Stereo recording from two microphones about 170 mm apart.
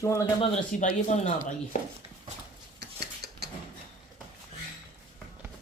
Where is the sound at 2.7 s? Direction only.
75° right (ahead or behind).